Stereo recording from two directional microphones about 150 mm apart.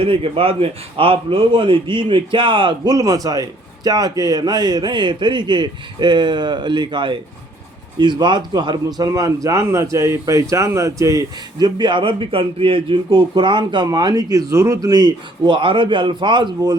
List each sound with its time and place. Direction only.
0.0 s a man's voice: 35° right (ahead or behind)